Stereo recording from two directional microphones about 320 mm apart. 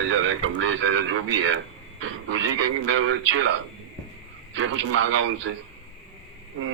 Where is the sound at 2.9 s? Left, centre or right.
Right.